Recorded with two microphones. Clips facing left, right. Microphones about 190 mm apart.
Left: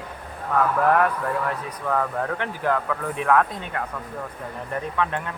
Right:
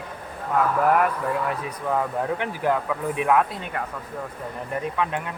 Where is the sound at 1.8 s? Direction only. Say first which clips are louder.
Even; 15° right (ahead or behind).